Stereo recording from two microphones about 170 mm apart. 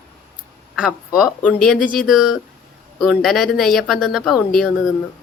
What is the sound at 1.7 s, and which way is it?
Speech, 50° left (ahead or behind).